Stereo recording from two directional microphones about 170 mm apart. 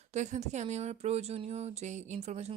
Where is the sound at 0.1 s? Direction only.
45° right (ahead or behind).